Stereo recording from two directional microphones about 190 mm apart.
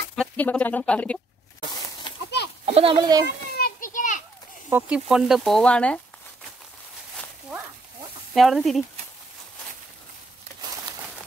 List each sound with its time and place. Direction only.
0.1 s speech: 5° left (ahead or behind)
2.6 s speech: 30° right (ahead or behind)
3.5 s a sound: 50° left (ahead or behind)
4.6 s speech: 10° right (ahead or behind)
8.4 s speech: centre (ahead or behind)